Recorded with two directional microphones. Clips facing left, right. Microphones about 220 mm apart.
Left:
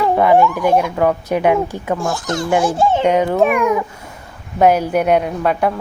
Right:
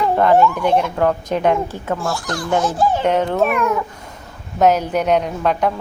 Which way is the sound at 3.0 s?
10° left (ahead or behind).